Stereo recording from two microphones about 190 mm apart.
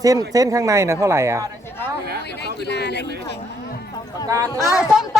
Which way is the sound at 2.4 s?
60° left (ahead or behind).